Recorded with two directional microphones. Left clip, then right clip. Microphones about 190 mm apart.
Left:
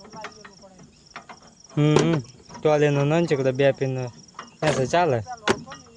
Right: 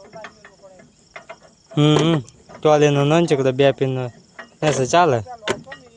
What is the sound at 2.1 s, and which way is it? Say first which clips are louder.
Speech: right 5 dB; 20° right (ahead or behind).